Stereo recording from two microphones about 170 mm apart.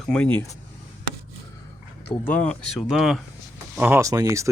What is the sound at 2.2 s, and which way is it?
Speech, 5° left (ahead or behind).